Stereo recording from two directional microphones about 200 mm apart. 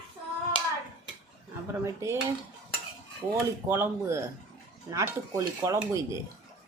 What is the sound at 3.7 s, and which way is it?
Speech, 10° right (ahead or behind).